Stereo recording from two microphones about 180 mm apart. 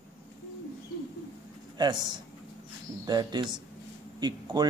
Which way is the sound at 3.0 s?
25° right (ahead or behind).